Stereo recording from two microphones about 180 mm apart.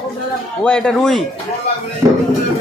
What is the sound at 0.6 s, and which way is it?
Speech, 5° left (ahead or behind).